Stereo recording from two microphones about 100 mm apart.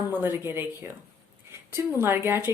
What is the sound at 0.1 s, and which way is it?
Speech, 20° right (ahead or behind).